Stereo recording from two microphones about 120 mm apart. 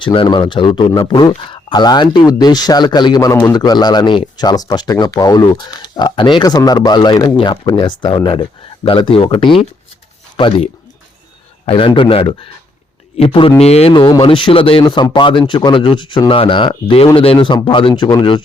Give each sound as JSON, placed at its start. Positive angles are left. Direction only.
{"t": 0.0, "sound": "speech", "side_deg": 45}
{"t": 0.9, "sound": "speech", "side_deg": 30}
{"t": 13.9, "sound": "speech", "side_deg": 40}